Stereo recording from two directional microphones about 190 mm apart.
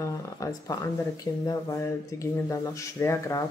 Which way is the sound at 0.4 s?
15° left (ahead or behind).